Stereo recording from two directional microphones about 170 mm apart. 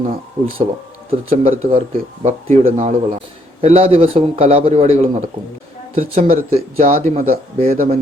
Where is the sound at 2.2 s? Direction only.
45° right (ahead or behind).